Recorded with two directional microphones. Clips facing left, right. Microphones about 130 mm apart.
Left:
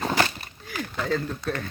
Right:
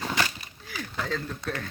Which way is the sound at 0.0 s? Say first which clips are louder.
Left 5 dB; 45° left (ahead or behind).